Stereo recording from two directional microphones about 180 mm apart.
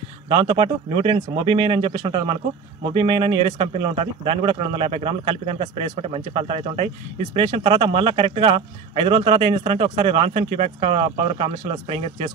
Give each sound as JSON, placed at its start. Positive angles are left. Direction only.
{"t": 0.3, "sound": "a man's voice", "side_deg": -30}